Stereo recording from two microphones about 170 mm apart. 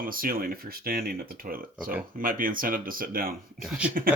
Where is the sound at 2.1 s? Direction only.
55° right (ahead or behind).